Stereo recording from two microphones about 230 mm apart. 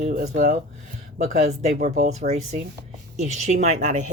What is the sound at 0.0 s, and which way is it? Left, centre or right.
Speech, right.